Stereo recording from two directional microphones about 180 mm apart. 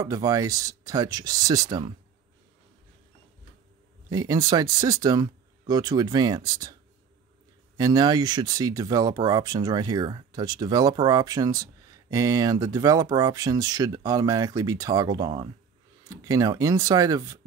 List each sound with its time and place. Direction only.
0.0 s speech: 20° right (ahead or behind)
4.1 s speech: 20° right (ahead or behind)
7.7 s speech: 20° right (ahead or behind)